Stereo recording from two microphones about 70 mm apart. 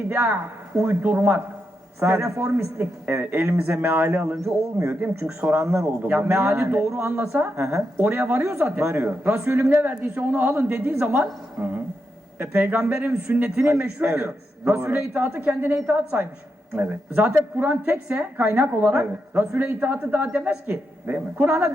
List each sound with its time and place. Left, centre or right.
0.1 s a woman's voice: right
2.0 s a man's voice: right
2.7 s a woman's voice: right
5.4 s a man's voice: right
8.5 s a woman's voice: right
8.8 s a man's voice: right
12.4 s a woman's voice: right
14.0 s a woman's voice: right